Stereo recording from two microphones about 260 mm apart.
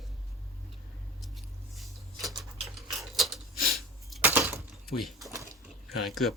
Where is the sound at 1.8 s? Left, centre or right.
Centre.